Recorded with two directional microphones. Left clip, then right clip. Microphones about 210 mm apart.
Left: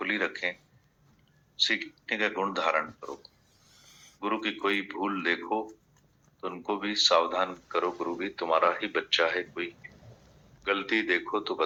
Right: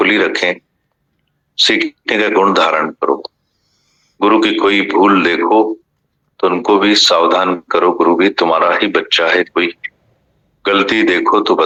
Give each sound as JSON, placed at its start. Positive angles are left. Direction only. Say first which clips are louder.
{"t": 0.0, "sound": "speech", "louder": "right 18 dB", "side_deg": -50}
{"t": 1.5, "sound": "speech", "louder": "right 15 dB", "side_deg": -50}
{"t": 3.8, "sound": "a sound", "louder": "left 5 dB", "side_deg": 25}
{"t": 4.2, "sound": "speech", "louder": "right 19 dB", "side_deg": -50}